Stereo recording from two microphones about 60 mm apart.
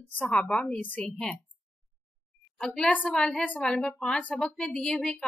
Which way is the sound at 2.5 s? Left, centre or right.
Centre.